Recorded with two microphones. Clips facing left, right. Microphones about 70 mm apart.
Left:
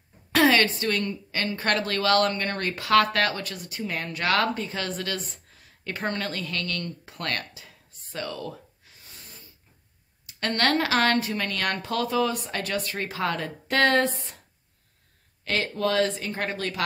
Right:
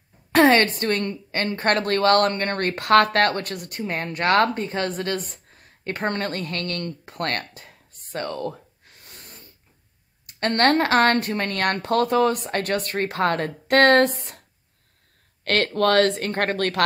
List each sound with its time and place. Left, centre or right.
0.3 s a woman's voice: right
3.8 s speech: right
10.4 s a woman's voice: right
15.4 s speech: right